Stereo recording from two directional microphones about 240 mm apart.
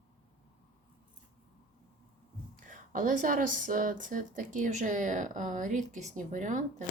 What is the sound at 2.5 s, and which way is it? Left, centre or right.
Speech, right.